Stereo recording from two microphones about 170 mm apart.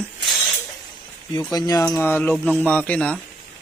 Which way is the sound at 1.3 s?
20° left (ahead or behind).